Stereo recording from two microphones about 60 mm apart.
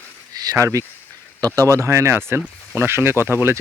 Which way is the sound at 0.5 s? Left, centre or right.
Right.